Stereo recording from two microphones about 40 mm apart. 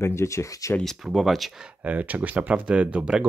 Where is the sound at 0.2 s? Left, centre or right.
Left.